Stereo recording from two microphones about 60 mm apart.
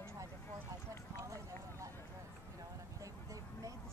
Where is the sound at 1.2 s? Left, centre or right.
Right.